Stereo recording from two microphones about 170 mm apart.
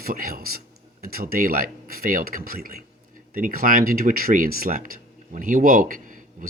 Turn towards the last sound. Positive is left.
turn(degrees=-50)  # may be behind; listen again after turning